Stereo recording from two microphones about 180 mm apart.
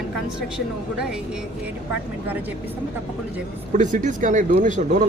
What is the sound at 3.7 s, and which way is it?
Speech, 45° right (ahead or behind).